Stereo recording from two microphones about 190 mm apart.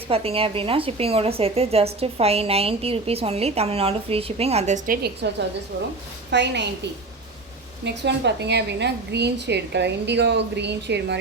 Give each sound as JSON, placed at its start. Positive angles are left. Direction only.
{"t": 0.1, "sound": "a woman's voice", "side_deg": -30}
{"t": 5.0, "sound": "a woman's voice", "side_deg": -65}
{"t": 7.9, "sound": "a woman's voice", "side_deg": -65}